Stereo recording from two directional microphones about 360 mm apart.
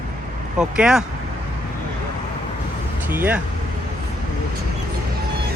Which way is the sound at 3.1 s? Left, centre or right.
Centre.